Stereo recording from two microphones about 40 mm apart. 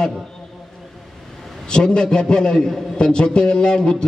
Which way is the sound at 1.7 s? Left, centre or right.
Left.